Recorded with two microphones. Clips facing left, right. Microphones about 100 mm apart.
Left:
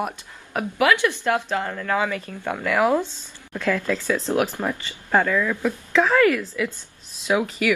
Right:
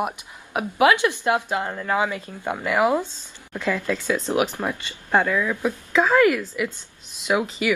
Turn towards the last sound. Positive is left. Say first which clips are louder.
# left 1 dB
turn(degrees=-10)  # may be behind; listen again after turning